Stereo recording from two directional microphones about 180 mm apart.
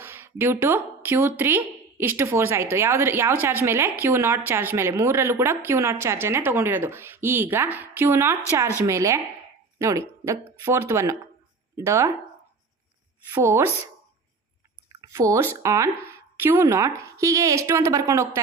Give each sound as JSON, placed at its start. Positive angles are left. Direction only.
{"t": 0.0, "sound": "a woman's voice", "side_deg": -10}
{"t": 13.3, "sound": "a woman's voice", "side_deg": -15}
{"t": 14.8, "sound": "a woman's voice", "side_deg": -20}